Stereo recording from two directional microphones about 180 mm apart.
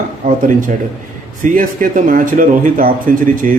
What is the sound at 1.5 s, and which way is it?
A man's voice, 50° right (ahead or behind).